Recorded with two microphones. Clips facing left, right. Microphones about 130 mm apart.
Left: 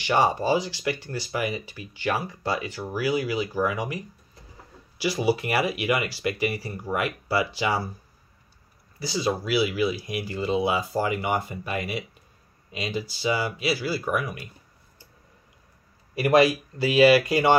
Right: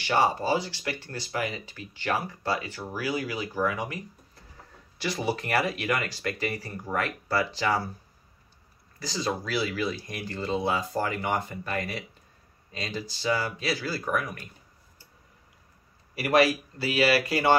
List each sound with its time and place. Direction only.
0.0 s speech: 15° left (ahead or behind)
9.0 s speech: 10° left (ahead or behind)
16.2 s speech: 20° left (ahead or behind)